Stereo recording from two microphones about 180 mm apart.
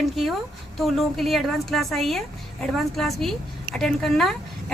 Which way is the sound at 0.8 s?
Centre (ahead or behind).